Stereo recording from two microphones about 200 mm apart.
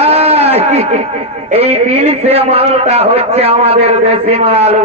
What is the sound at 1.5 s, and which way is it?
A man's voice, 30° right (ahead or behind).